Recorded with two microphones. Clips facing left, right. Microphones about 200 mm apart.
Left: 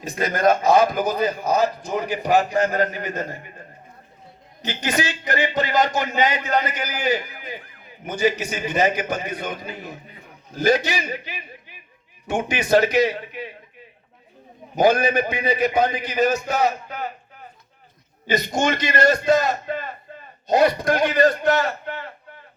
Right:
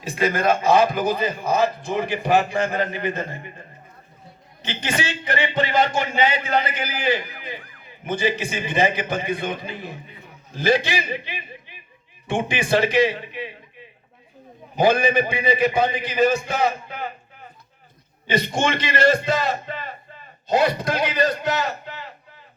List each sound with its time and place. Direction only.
0.0 s a man's voice: 40° left (ahead or behind)
4.6 s a man's voice: 40° left (ahead or behind)
8.2 s a man's voice: 40° left (ahead or behind)
14.8 s a man's voice: 40° left (ahead or behind)
18.4 s a man's voice: 40° left (ahead or behind); by 22.1 s 55° left (ahead or behind)